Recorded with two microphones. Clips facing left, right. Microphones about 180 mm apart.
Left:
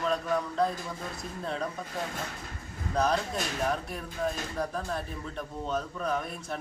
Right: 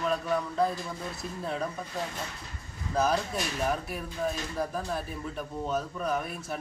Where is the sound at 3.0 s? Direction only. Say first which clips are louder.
Even; 5° right (ahead or behind).